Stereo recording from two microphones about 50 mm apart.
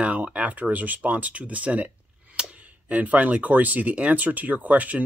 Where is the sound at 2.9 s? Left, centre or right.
Right.